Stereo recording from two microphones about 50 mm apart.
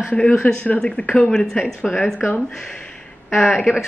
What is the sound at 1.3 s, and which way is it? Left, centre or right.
Speech, centre.